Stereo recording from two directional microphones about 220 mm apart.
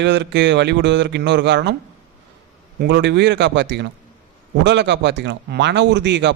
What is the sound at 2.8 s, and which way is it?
A man's voice, 50° right (ahead or behind).